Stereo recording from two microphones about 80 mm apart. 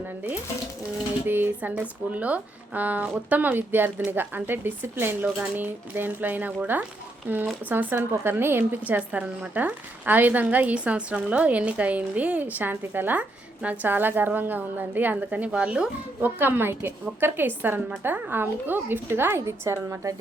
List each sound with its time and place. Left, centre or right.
1.3 s a woman's voice: right
9.0 s a woman's voice: centre
16.2 s a woman's voice: right